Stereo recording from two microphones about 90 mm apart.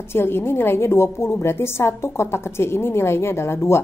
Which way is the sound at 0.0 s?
25° left (ahead or behind).